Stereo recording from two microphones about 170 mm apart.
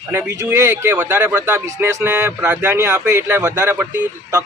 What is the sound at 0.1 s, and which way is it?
Speech, 15° right (ahead or behind).